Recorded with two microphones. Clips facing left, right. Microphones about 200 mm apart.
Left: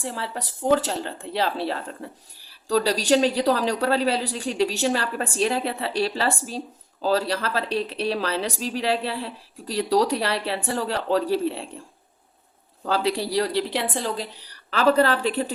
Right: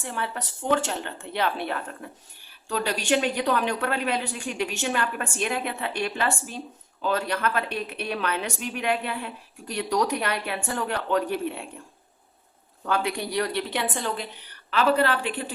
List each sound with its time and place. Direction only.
0.0 s speech: 30° left (ahead or behind)
12.8 s speech: 30° left (ahead or behind)